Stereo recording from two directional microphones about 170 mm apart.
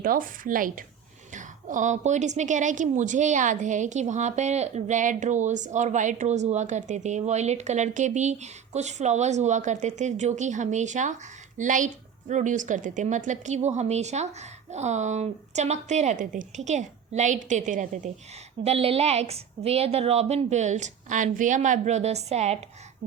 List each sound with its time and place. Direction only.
0.0 s a woman's voice: 55° right (ahead or behind)
18.6 s a woman's voice: 35° right (ahead or behind)